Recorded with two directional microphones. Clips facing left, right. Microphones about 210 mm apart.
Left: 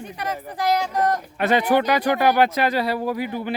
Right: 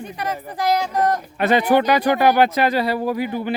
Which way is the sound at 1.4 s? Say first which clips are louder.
Right 2 dB; 30° right (ahead or behind).